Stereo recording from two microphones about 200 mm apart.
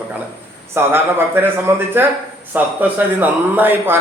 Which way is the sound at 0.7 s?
10° right (ahead or behind).